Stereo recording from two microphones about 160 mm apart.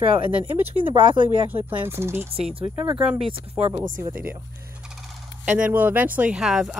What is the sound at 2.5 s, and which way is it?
Speech, 35° right (ahead or behind).